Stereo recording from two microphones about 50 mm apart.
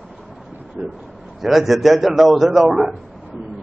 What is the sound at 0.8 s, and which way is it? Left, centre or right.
Speech, right.